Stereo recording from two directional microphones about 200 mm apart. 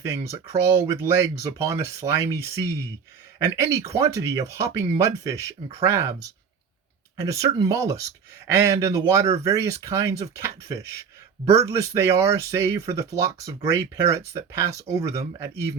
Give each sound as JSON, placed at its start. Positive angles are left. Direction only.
{"t": 0.9, "sound": "speech", "side_deg": -10}
{"t": 7.2, "sound": "speech", "side_deg": -15}